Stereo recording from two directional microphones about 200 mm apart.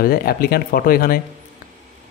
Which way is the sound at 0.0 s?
50° left (ahead or behind).